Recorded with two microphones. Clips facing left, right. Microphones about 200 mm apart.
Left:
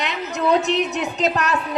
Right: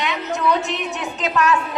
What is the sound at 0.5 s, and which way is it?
Music, 40° left (ahead or behind).